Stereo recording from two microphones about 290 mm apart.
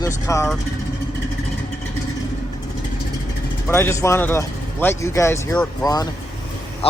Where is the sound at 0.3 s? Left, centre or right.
Centre.